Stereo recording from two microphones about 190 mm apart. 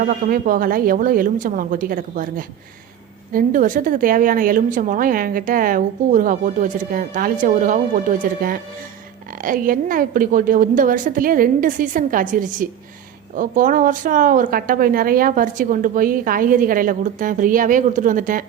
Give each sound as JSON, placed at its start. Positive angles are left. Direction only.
{"t": 0.0, "sound": "a woman's voice", "side_deg": -50}